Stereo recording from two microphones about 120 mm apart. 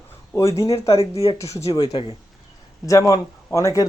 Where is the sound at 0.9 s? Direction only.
50° left (ahead or behind).